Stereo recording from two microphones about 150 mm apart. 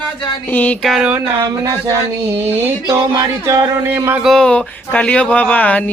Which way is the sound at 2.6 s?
15° right (ahead or behind).